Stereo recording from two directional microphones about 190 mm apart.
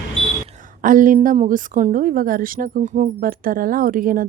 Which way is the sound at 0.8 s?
45° right (ahead or behind).